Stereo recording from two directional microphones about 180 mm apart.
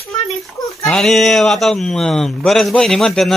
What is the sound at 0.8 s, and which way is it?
Speech, centre (ahead or behind).